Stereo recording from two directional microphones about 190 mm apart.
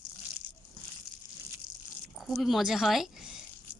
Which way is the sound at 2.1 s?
Centre (ahead or behind).